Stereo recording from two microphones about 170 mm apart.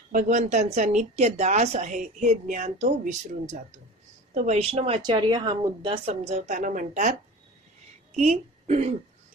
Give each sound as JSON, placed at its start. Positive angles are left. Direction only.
{"t": 0.1, "sound": "speech", "side_deg": -50}
{"t": 8.2, "sound": "a woman's voice", "side_deg": -40}